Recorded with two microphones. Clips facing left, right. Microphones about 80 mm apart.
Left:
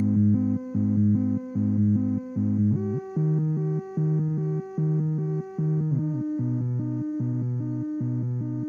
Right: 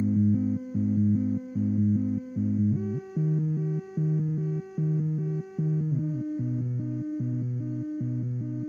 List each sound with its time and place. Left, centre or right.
0.0 s music: left